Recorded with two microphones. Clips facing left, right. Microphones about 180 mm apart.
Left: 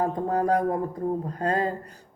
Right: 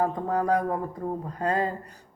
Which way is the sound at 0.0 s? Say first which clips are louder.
Left 1 dB; 35° left (ahead or behind).